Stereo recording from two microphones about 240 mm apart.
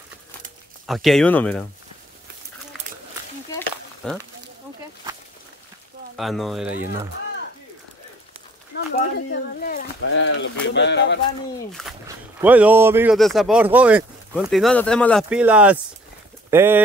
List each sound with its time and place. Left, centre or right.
0.8 s speech: centre
3.4 s a sound: centre
6.1 s speech: centre
8.7 s speech: left
10.0 s speech: left
12.4 s speech: centre